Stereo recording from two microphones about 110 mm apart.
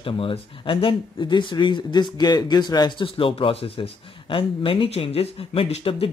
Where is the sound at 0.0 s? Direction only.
55° left (ahead or behind).